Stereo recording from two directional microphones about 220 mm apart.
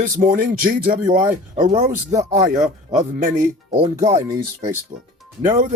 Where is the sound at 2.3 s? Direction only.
35° right (ahead or behind).